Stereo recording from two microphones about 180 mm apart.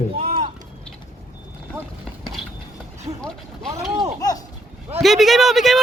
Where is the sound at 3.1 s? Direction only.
35° right (ahead or behind).